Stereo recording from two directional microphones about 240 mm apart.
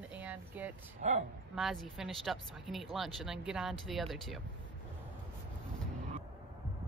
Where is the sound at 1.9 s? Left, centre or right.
Centre.